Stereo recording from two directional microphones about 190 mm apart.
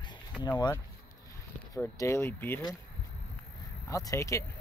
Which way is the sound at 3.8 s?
15° left (ahead or behind).